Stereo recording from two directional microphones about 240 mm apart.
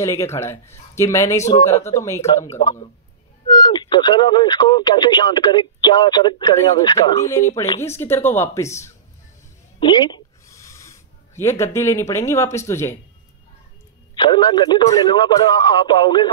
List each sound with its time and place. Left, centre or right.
0.0 s a man's voice: centre
9.8 s a sound: centre
14.1 s speech: centre